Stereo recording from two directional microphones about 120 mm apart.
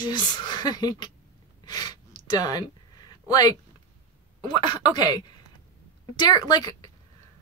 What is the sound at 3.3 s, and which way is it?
Speech, 30° left (ahead or behind).